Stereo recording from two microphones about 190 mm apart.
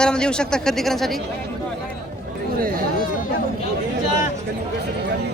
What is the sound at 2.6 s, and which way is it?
Speech, 50° right (ahead or behind).